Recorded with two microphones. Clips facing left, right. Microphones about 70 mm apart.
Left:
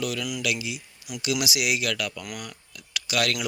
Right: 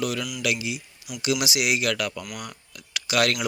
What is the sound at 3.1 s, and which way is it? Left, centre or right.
Speech, right.